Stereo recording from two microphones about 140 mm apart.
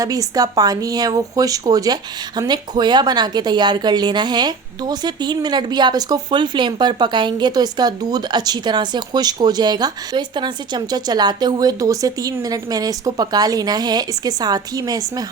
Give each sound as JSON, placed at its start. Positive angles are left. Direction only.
{"t": 0.0, "sound": "speech", "side_deg": -25}